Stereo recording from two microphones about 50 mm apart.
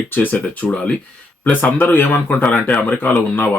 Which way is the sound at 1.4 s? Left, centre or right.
Left.